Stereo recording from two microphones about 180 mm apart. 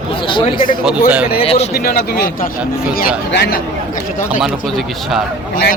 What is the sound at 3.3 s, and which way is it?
Speech, 70° left (ahead or behind).